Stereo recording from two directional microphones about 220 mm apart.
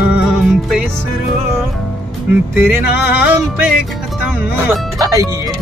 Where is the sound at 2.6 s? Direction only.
10° right (ahead or behind).